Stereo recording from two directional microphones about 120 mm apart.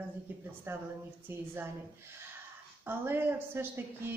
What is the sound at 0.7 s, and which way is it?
Speech, 20° right (ahead or behind).